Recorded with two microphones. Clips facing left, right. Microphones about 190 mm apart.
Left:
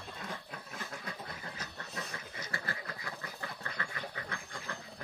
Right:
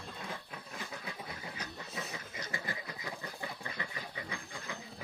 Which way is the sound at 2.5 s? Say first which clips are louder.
Left 1 dB; 15° right (ahead or behind).